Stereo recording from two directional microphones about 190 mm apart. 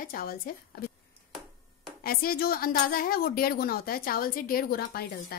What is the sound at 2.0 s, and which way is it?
Speech, 50° left (ahead or behind).